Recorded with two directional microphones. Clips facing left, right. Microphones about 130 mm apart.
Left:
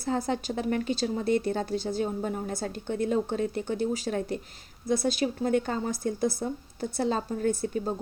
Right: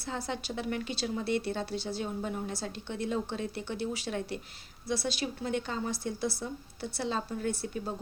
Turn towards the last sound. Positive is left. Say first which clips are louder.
# left 6 dB
turn(degrees=40)  # may be behind; listen again after turning